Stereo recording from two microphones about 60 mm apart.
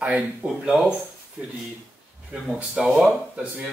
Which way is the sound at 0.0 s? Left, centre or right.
Right.